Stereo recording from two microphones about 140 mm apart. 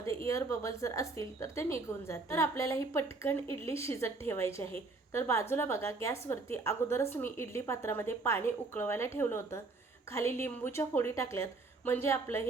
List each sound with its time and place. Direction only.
0.3 s a woman's voice: 20° left (ahead or behind)